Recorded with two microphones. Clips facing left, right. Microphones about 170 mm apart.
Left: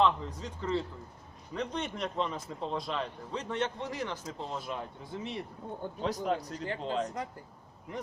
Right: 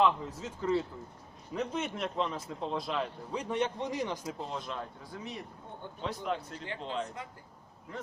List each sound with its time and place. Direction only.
0.0 s a man's voice: 5° right (ahead or behind)
4.4 s a man's voice: centre (ahead or behind)
5.0 s speech: 25° left (ahead or behind)
6.0 s speech: 40° left (ahead or behind)